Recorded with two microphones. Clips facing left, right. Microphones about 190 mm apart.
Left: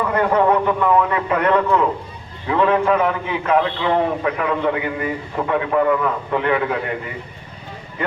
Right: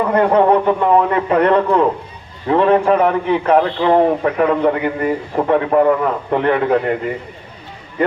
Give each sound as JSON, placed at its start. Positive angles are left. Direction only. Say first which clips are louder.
{"t": 0.0, "sound": "a man's voice", "louder": "right 4 dB", "side_deg": -30}